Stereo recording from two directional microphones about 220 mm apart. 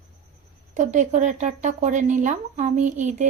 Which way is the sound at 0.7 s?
35° right (ahead or behind).